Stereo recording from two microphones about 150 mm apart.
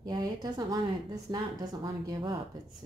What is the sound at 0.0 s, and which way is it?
A woman's voice, 25° right (ahead or behind).